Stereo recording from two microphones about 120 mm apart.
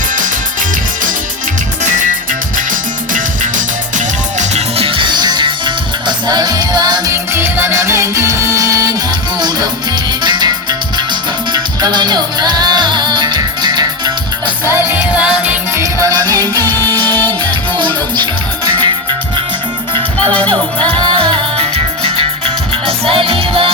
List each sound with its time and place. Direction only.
3.1 s music: 90° right
4.8 s music: 45° right (ahead or behind)
7.1 s music: 20° right (ahead or behind)
10.2 s music: 35° right (ahead or behind)
14.7 s music: 15° right (ahead or behind)
15.7 s music: 25° right (ahead or behind)
16.6 s music: 15° left (ahead or behind)
18.2 s music: 40° right (ahead or behind)
21.0 s music: 45° right (ahead or behind)